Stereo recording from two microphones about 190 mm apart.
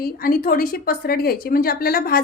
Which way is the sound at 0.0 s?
50° left (ahead or behind).